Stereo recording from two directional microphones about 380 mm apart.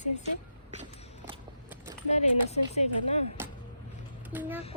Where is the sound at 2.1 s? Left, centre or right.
Centre.